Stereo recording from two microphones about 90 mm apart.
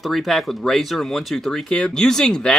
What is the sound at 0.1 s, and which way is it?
Speech, centre (ahead or behind).